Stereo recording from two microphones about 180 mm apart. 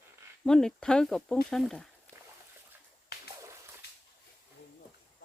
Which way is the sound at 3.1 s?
65° left (ahead or behind).